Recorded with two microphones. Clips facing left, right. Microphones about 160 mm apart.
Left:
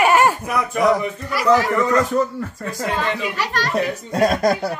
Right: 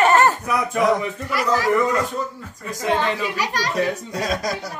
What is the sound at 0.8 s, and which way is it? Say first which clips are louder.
Speech: left 3 dB; centre (ahead or behind).